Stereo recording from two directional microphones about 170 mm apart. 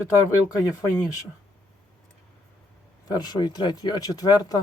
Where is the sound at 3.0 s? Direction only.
20° left (ahead or behind).